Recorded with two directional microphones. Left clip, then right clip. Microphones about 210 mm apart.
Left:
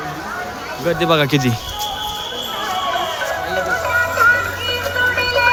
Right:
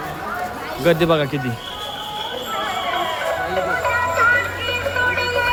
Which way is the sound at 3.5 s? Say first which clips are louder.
Left 4 dB; 15° left (ahead or behind).